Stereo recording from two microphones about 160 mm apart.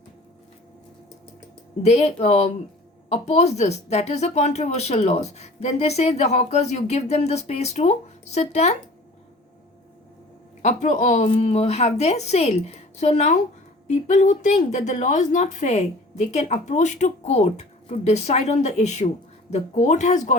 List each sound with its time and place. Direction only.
1.8 s speech: 45° left (ahead or behind)
10.6 s speech: 45° left (ahead or behind)
11.3 s speech: 40° left (ahead or behind)